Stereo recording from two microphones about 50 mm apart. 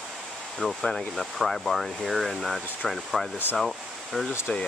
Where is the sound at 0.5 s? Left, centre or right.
Centre.